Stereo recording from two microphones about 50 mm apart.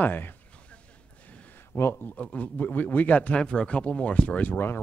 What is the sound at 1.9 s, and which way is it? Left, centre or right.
A man's voice, left.